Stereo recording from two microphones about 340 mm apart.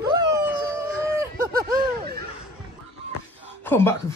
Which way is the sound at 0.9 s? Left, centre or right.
Centre.